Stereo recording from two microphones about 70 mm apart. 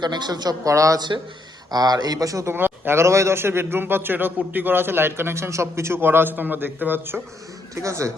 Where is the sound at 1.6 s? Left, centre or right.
Right.